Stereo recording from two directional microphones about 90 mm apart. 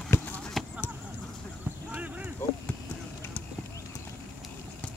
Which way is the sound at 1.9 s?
15° right (ahead or behind).